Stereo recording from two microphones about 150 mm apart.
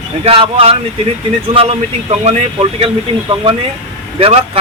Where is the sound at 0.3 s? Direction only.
40° right (ahead or behind).